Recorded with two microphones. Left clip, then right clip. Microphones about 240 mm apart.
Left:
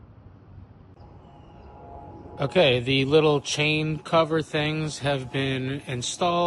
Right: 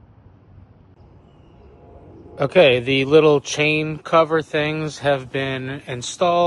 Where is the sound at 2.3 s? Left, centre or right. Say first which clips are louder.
Right 7 dB; right.